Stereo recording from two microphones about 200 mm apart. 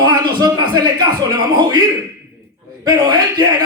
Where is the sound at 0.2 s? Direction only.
20° right (ahead or behind).